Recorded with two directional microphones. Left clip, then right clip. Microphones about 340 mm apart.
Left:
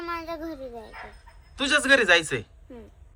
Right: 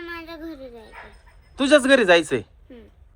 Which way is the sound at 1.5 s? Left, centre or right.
Centre.